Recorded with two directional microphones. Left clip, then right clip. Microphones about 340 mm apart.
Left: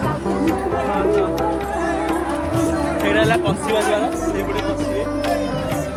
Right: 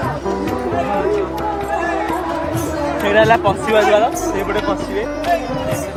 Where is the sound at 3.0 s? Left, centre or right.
Right.